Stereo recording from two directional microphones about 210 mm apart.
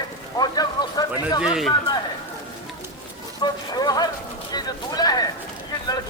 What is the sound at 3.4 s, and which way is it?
Speech, 20° left (ahead or behind).